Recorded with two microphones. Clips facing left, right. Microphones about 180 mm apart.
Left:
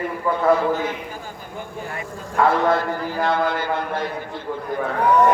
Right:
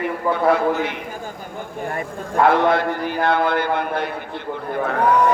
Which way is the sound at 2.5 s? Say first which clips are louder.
Right 2 dB; 65° right (ahead or behind).